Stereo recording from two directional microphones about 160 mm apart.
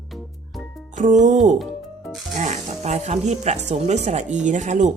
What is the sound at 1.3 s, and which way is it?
Speech, 50° right (ahead or behind).